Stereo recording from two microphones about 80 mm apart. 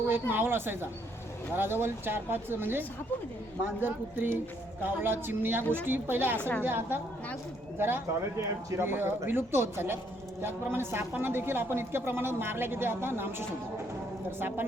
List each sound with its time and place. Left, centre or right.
0.1 s speech: right
14.3 s speech: right